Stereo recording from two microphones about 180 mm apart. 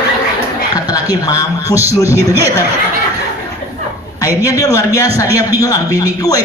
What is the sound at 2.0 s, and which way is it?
Speech, 15° right (ahead or behind).